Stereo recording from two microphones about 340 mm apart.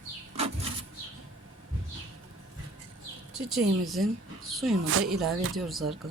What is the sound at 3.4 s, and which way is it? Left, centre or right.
Speech, centre.